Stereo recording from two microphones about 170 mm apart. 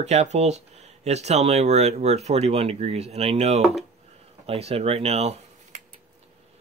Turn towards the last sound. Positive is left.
turn(degrees=-40)  # may be behind; listen again after turning